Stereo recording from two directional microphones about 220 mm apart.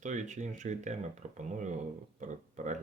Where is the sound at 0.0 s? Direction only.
35° right (ahead or behind).